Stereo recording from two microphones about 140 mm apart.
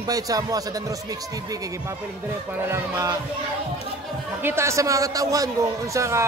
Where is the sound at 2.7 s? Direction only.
20° right (ahead or behind).